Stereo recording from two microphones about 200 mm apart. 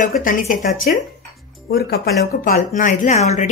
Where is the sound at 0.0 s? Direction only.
40° left (ahead or behind).